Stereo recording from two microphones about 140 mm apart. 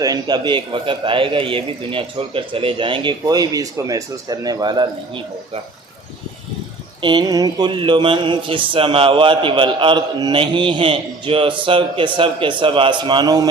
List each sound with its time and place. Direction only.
0.0 s speech: 30° right (ahead or behind)
7.0 s speech: 30° right (ahead or behind)